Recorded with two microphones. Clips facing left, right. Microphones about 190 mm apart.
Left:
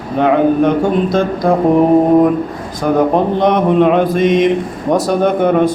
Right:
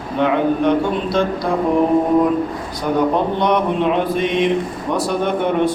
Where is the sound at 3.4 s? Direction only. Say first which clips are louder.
Left 8 dB; 50° left (ahead or behind).